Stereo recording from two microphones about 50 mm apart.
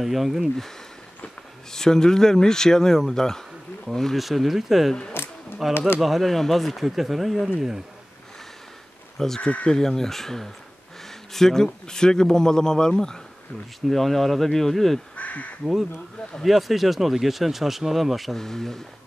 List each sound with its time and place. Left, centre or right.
0.0 s speech: centre
1.7 s a man's voice: centre
5.2 s a sound: left
5.6 s speech: centre
7.4 s speech: centre
9.4 s speech: left
9.7 s a man's voice: centre
13.7 s speech: centre
15.1 s speech: left
15.6 s speech: centre